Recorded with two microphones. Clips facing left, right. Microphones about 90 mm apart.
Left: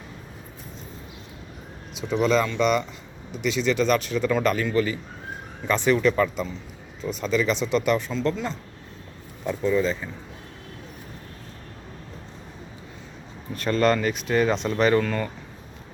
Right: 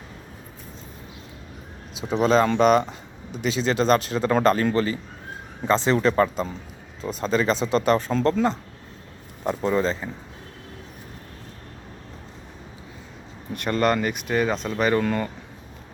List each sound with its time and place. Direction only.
2.0 s speech: 40° right (ahead or behind)
13.7 s speech: 20° right (ahead or behind)
15.0 s speech: 20° right (ahead or behind)